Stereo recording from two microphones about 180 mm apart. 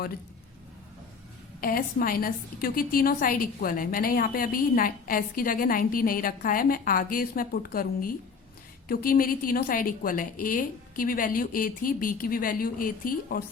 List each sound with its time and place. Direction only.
1.6 s a woman's voice: 50° left (ahead or behind)